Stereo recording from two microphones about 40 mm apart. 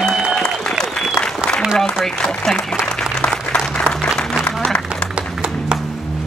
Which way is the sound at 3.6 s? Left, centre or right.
Centre.